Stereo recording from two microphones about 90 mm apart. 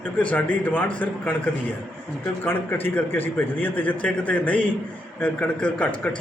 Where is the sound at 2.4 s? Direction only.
20° left (ahead or behind).